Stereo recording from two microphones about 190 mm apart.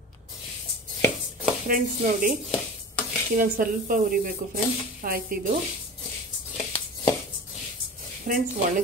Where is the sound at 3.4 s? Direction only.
45° right (ahead or behind).